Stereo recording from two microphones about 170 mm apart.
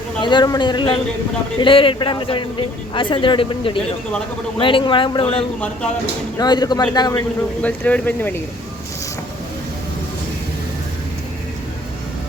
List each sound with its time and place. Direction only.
0.2 s a man's voice: 25° left (ahead or behind)
6.4 s a man's voice: 25° left (ahead or behind)
7.6 s speech: 10° left (ahead or behind)